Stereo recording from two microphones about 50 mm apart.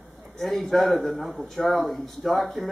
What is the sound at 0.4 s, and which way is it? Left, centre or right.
Speech, centre.